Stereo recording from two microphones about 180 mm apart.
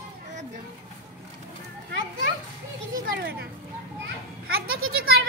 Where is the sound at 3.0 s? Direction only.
55° right (ahead or behind).